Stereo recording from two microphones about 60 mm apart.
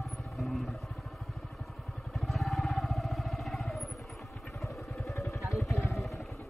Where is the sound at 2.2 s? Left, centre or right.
Centre.